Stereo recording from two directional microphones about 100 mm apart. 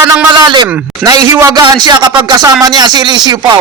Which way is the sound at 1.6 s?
45° right (ahead or behind).